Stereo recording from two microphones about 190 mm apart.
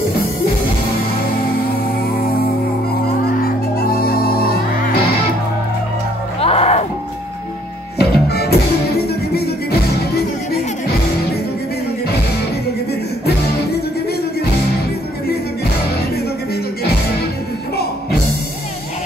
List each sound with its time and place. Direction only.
3.3 s music: 55° left (ahead or behind)
6.4 s music: 30° left (ahead or behind)
8.0 s music: 55° left (ahead or behind)